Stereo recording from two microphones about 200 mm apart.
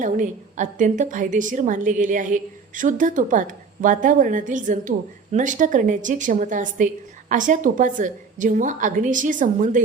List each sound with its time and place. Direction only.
0.0 s a woman's voice: 40° right (ahead or behind)